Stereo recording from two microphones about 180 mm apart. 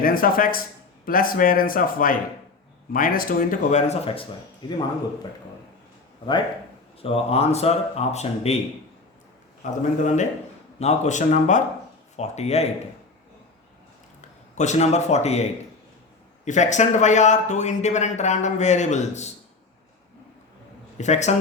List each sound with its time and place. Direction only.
0.0 s speech: 50° left (ahead or behind); by 4.3 s 30° left (ahead or behind)
7.0 s a man's voice: 35° left (ahead or behind)
9.6 s a man's voice: 45° left (ahead or behind)
14.2 s a man's voice: 40° left (ahead or behind)
21.0 s a man's voice: 40° left (ahead or behind)